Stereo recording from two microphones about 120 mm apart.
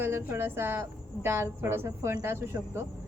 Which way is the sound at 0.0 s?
20° right (ahead or behind).